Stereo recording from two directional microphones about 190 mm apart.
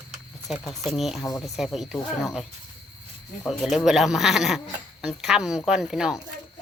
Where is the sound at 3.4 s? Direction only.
Centre (ahead or behind).